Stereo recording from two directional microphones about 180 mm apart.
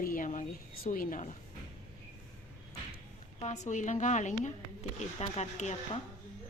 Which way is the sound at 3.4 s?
40° left (ahead or behind).